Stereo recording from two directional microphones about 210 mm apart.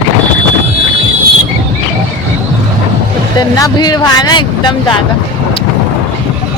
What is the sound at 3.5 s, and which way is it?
Speech, 20° left (ahead or behind).